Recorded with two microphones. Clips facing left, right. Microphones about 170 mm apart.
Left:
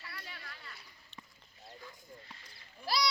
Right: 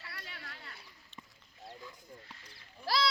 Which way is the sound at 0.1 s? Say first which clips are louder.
Even; 65° right (ahead or behind).